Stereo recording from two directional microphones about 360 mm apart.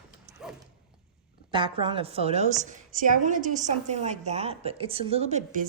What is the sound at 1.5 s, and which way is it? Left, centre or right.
A woman's voice, centre.